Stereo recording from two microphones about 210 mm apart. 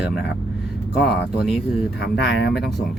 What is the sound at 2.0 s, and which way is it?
Speech, 50° left (ahead or behind).